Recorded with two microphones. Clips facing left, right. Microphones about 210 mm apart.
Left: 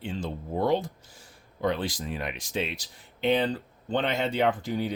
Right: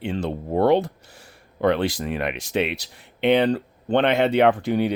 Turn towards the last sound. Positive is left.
turn(degrees=-65)  # may be behind; listen again after turning